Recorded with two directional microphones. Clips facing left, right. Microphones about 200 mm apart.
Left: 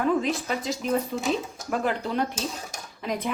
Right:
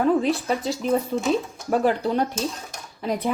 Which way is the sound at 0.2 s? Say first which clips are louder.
Right 4 dB; 35° right (ahead or behind).